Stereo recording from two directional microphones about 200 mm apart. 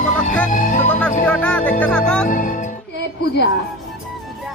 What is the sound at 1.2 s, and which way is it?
Music, 5° left (ahead or behind).